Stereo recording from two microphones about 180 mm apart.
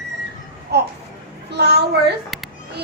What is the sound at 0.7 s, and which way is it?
A child's voice, 65° right (ahead or behind).